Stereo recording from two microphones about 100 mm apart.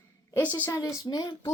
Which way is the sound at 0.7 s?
35° left (ahead or behind).